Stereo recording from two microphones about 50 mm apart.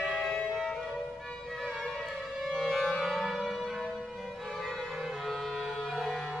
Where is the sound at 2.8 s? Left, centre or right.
Centre.